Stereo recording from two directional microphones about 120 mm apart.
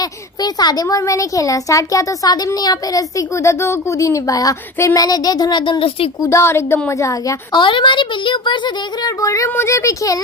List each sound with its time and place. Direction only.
0.0 s a child's voice: 35° left (ahead or behind); by 6.0 s 50° left (ahead or behind)
6.2 s a child's voice: 20° left (ahead or behind)
7.5 s speech: 45° left (ahead or behind)
9.2 s a child's voice: 25° left (ahead or behind)